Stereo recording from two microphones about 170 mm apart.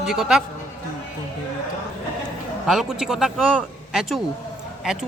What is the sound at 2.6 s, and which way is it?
Speech, centre (ahead or behind).